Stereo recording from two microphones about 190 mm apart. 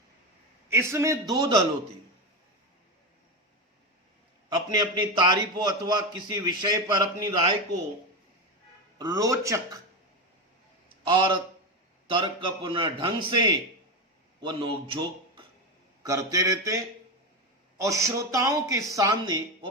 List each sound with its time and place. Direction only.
0.7 s a man's voice: 15° right (ahead or behind)
4.4 s a man's voice: 20° right (ahead or behind)
9.0 s a man's voice: 20° right (ahead or behind)
10.8 s a sound: 25° right (ahead or behind)
12.0 s a man's voice: 25° right (ahead or behind)